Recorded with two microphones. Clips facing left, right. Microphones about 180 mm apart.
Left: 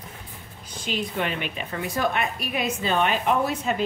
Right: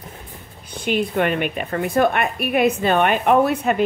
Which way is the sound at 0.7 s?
60° right (ahead or behind).